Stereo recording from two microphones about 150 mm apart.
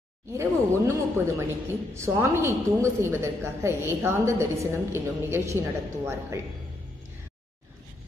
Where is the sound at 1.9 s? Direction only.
15° right (ahead or behind).